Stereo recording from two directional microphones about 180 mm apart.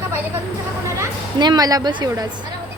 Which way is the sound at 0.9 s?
20° right (ahead or behind).